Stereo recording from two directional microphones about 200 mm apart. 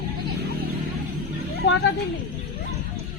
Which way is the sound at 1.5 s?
65° left (ahead or behind).